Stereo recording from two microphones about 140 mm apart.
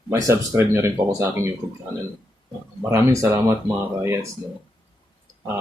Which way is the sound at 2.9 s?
20° right (ahead or behind).